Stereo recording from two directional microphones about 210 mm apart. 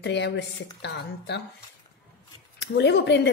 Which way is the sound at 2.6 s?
55° left (ahead or behind).